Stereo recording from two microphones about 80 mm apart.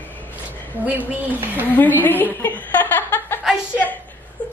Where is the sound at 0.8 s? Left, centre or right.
Right.